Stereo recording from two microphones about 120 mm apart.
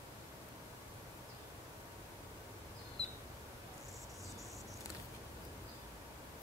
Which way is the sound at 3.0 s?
Centre (ahead or behind).